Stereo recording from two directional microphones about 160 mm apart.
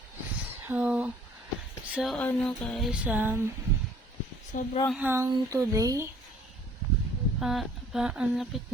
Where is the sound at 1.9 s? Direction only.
Centre (ahead or behind).